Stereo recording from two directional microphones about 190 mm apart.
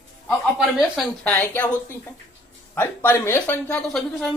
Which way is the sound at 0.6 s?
5° right (ahead or behind).